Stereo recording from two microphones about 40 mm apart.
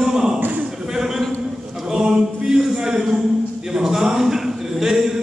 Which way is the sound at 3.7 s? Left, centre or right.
Centre.